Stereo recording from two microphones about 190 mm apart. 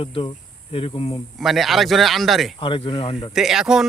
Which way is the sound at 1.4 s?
Centre (ahead or behind).